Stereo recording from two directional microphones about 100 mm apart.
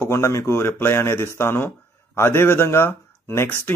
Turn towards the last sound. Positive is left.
turn(degrees=20)  # may be behind; listen again after turning